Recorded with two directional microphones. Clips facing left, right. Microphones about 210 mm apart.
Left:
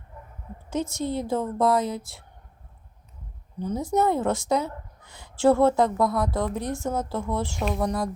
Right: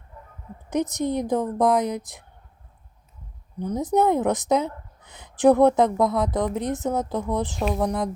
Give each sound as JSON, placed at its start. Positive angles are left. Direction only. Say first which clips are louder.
{"t": 0.7, "sound": "a woman's voice", "louder": "right 3 dB", "side_deg": -20}
{"t": 3.8, "sound": "a woman's voice", "louder": "right 3 dB", "side_deg": -20}